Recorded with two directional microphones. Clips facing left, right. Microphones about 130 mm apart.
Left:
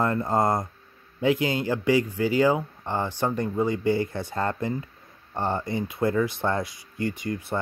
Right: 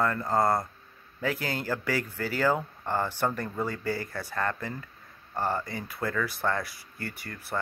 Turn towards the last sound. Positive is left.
turn(degrees=20)  # may be behind; listen again after turning